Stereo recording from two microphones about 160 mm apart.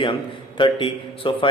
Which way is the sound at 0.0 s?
30° left (ahead or behind).